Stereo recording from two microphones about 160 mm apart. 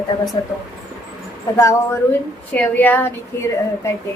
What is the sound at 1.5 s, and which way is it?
A woman's voice, 20° left (ahead or behind).